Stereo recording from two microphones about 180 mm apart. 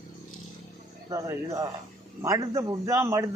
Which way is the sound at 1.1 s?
15° right (ahead or behind).